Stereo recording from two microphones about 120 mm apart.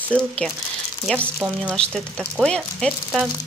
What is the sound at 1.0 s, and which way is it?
Speech, 10° left (ahead or behind).